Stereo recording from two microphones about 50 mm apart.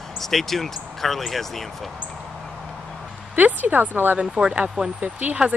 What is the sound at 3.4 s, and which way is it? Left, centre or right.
Speech, right.